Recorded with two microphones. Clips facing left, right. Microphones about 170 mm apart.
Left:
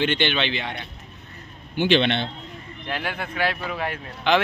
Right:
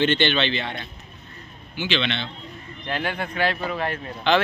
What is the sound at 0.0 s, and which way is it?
Speech, 10° left (ahead or behind).